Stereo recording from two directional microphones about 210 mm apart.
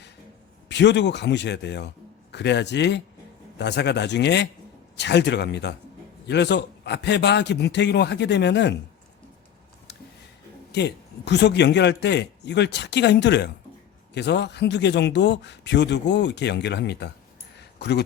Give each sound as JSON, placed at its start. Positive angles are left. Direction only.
{"t": 0.7, "sound": "a man's voice", "side_deg": 55}
{"t": 10.7, "sound": "a man's voice", "side_deg": 55}
{"t": 17.6, "sound": "a sound", "side_deg": 50}